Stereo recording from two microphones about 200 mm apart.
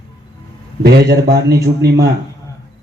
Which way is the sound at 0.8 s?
55° right (ahead or behind).